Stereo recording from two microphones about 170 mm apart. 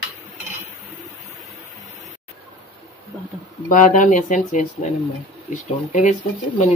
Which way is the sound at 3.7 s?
45° left (ahead or behind).